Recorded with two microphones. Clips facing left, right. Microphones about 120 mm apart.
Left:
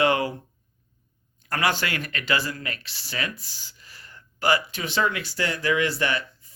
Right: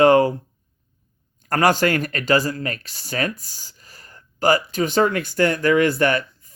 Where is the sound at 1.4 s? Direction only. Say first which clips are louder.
Right 8 dB; 45° right (ahead or behind).